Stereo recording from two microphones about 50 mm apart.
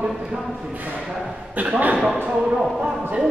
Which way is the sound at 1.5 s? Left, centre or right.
Right.